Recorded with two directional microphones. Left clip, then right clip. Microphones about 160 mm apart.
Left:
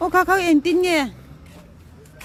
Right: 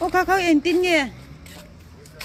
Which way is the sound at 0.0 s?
30° left (ahead or behind).